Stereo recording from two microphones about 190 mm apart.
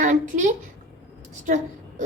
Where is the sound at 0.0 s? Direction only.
40° right (ahead or behind).